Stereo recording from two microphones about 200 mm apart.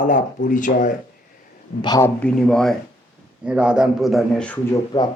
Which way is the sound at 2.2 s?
5° left (ahead or behind).